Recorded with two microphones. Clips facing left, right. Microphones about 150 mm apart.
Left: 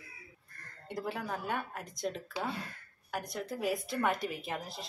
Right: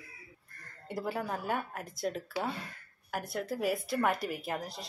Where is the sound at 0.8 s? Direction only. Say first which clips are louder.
Right 2 dB; 5° right (ahead or behind).